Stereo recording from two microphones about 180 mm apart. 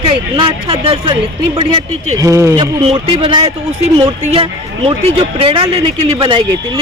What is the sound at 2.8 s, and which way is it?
Speech, 30° right (ahead or behind).